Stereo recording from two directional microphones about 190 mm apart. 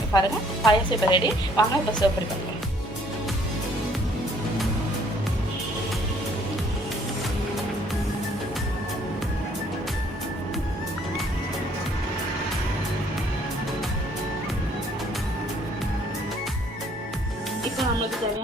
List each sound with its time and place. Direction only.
0.1 s a woman's voice: 20° left (ahead or behind)